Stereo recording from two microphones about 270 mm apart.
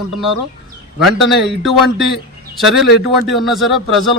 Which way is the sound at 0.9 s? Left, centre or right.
Centre.